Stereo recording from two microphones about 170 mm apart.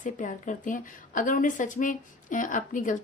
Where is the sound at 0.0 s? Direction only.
50° left (ahead or behind).